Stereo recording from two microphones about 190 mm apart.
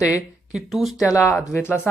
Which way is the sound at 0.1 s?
5° right (ahead or behind).